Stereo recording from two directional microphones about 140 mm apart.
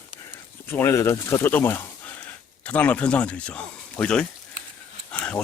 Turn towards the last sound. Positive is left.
turn(degrees=5)  # may be behind; listen again after turning